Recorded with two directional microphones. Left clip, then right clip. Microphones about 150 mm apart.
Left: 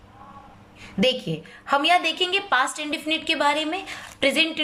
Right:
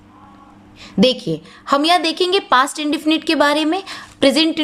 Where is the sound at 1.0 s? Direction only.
30° right (ahead or behind).